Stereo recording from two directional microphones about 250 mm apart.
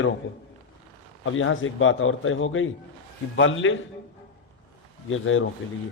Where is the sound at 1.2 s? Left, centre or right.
Left.